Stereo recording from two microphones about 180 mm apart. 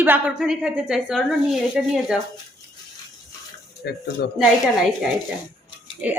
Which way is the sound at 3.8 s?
65° left (ahead or behind).